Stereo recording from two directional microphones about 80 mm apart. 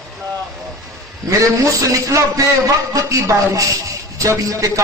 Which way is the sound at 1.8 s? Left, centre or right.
Right.